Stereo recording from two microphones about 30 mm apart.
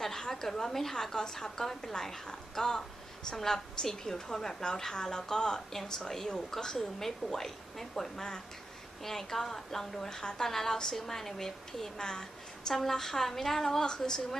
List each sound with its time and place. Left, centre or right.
0.0 s a woman's voice: centre
9.9 s a woman's voice: left
12.0 s a woman's voice: left
12.7 s a woman's voice: centre
13.8 s a woman's voice: left